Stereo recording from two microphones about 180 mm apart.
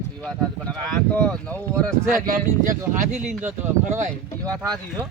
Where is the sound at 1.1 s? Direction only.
5° left (ahead or behind).